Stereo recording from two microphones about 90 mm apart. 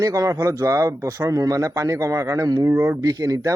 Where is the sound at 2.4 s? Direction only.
50° right (ahead or behind).